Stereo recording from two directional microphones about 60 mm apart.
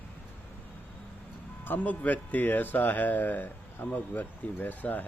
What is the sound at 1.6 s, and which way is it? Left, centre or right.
Speech, left.